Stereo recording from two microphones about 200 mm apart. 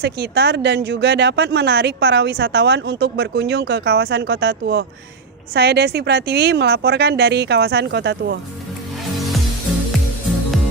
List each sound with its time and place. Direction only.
0.0 s speech: 55° right (ahead or behind)